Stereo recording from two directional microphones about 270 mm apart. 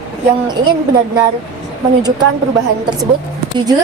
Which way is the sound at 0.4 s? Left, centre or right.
Centre.